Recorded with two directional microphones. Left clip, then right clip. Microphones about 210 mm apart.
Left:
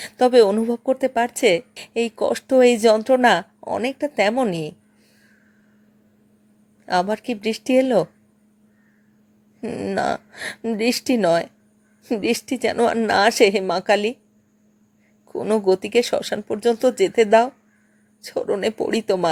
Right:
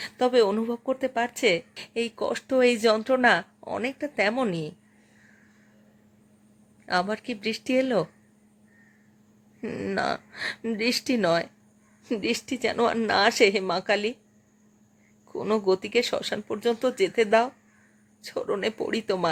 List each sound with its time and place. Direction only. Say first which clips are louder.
0.0 s speech: left 7 dB; 20° left (ahead or behind)
6.8 s speech: left 6 dB; 15° left (ahead or behind)
9.6 s speech: left 5 dB; 5° left (ahead or behind)
15.3 s speech: left 5 dB; 10° left (ahead or behind)